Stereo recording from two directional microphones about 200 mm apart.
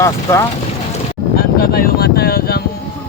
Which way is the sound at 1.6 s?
50° left (ahead or behind).